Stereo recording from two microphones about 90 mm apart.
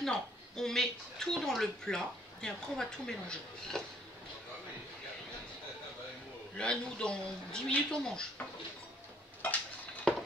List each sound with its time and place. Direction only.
0.0 s speech: 5° left (ahead or behind)
6.5 s speech: 10° left (ahead or behind)
9.4 s speech: 15° left (ahead or behind)
10.1 s a sound: 5° left (ahead or behind)